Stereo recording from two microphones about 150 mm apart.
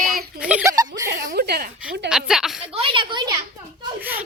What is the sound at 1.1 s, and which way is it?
Speech, 75° right (ahead or behind).